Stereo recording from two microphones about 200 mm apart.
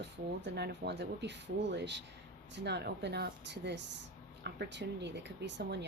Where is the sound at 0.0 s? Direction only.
60° right (ahead or behind).